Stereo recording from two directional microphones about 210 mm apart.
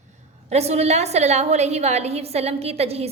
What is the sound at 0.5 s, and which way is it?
A woman's voice, 30° right (ahead or behind).